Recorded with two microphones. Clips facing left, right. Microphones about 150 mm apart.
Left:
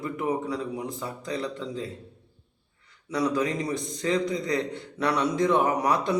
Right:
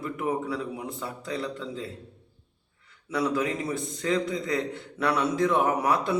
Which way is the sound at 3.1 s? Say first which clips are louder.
Left 1 dB; 5° right (ahead or behind).